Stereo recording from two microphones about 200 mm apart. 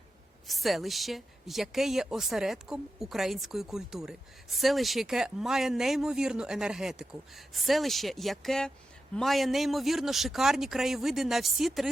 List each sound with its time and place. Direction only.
0.4 s a woman's voice: centre (ahead or behind)